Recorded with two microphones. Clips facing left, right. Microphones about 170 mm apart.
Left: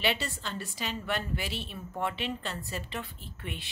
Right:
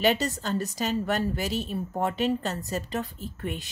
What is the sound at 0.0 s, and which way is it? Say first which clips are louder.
A woman's voice: right 7 dB; 40° right (ahead or behind).